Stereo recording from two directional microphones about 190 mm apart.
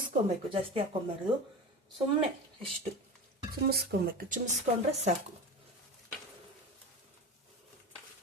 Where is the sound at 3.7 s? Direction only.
55° right (ahead or behind).